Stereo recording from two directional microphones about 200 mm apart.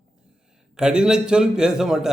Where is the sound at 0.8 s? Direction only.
5° right (ahead or behind).